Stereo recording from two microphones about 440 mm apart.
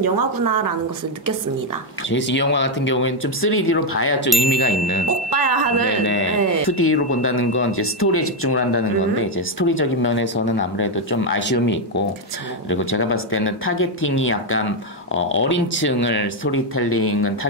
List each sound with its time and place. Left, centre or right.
0.0 s a woman's voice: right
2.0 s speech: left
5.3 s speech: right
6.0 s speech: left